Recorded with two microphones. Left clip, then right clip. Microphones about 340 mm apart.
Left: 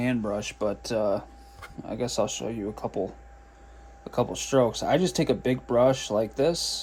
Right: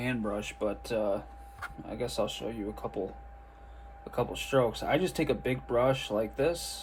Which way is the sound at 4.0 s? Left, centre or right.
Left.